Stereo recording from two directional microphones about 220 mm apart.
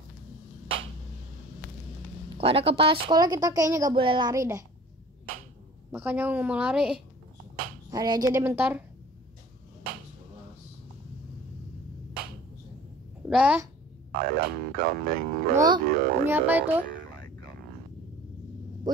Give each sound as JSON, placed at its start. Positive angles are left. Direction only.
{"t": 2.3, "sound": "a woman's voice", "side_deg": -25}
{"t": 5.9, "sound": "a woman's voice", "side_deg": -5}
{"t": 7.9, "sound": "a woman's voice", "side_deg": -15}
{"t": 13.3, "sound": "a child's voice", "side_deg": -5}
{"t": 14.1, "sound": "music", "side_deg": -40}
{"t": 15.5, "sound": "a woman's voice", "side_deg": -20}
{"t": 15.9, "sound": "music", "side_deg": -40}
{"t": 16.3, "sound": "a woman's voice", "side_deg": -10}